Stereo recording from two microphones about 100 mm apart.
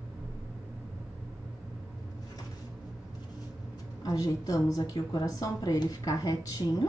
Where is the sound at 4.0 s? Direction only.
35° left (ahead or behind).